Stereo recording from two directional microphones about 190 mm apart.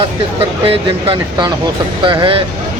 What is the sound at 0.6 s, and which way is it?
Speech, 30° right (ahead or behind).